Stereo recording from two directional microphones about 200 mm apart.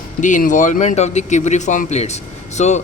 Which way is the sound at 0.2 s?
40° left (ahead or behind).